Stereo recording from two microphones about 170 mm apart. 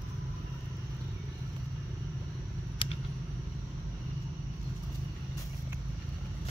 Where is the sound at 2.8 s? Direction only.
30° left (ahead or behind).